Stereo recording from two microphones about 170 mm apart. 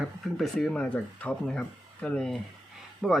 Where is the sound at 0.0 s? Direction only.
Centre (ahead or behind).